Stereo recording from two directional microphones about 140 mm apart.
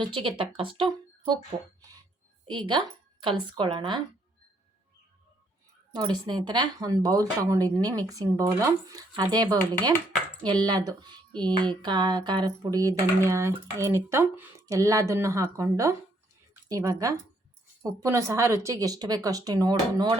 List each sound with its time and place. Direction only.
0.0 s speech: 40° right (ahead or behind)
0.8 s a sound: 35° right (ahead or behind)
2.5 s speech: 35° right (ahead or behind)
5.9 s speech: 30° right (ahead or behind)